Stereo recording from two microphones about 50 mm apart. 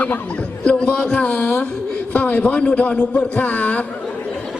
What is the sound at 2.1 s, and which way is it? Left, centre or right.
A man's voice, left.